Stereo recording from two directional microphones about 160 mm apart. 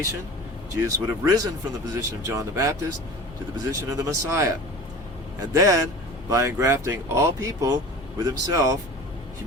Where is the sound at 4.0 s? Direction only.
20° right (ahead or behind).